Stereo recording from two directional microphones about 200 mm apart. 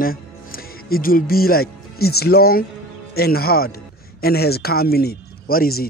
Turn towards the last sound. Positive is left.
turn(degrees=50)  # may be behind; listen again after turning